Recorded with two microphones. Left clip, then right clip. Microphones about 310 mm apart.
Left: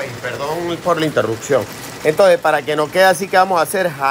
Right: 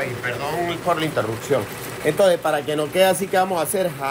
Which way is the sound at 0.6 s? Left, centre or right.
Centre.